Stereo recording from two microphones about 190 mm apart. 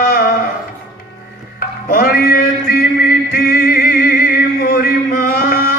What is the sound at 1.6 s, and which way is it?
Music, 50° left (ahead or behind).